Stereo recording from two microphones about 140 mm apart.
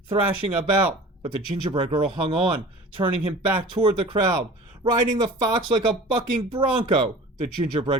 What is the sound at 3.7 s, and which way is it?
Speech, 35° right (ahead or behind).